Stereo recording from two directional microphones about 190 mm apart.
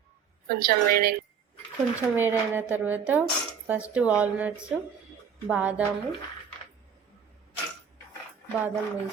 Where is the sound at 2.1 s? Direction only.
10° right (ahead or behind).